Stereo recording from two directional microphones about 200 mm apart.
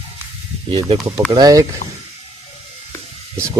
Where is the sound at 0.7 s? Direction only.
25° right (ahead or behind).